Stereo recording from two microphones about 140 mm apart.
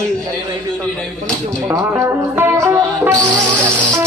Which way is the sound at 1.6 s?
20° right (ahead or behind).